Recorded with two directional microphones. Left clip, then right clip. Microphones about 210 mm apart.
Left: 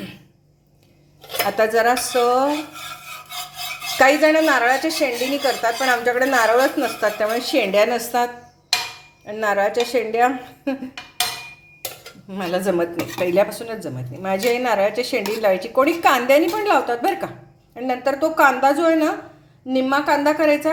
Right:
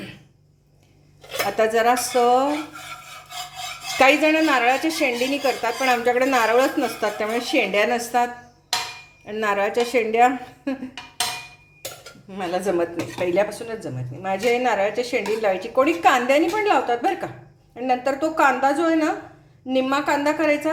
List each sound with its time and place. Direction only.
1.3 s a woman's voice: 5° left (ahead or behind)
3.9 s a woman's voice: centre (ahead or behind)
12.3 s a woman's voice: 5° left (ahead or behind)